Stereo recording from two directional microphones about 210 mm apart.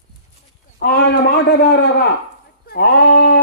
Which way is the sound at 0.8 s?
50° left (ahead or behind).